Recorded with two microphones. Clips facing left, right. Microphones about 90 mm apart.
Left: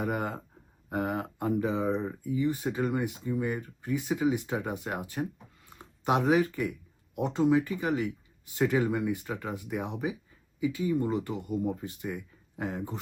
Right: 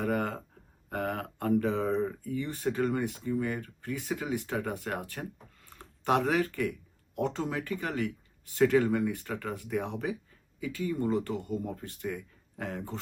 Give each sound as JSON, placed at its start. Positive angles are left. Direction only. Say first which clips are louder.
{"t": 0.0, "sound": "speech", "louder": "right 1 dB", "side_deg": 15}